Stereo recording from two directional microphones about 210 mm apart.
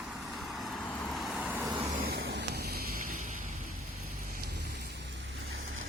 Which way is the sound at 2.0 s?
50° right (ahead or behind).